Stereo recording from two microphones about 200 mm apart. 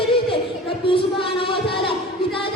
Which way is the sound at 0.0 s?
25° left (ahead or behind).